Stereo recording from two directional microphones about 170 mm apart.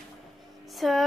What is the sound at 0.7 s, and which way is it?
Speech, centre (ahead or behind).